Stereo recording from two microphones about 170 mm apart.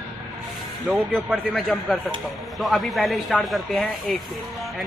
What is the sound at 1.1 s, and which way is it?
A man's voice, centre (ahead or behind).